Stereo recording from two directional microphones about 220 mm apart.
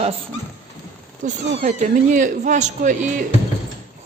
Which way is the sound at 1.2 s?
35° right (ahead or behind).